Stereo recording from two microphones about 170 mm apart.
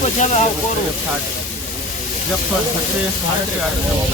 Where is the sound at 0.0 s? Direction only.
45° left (ahead or behind).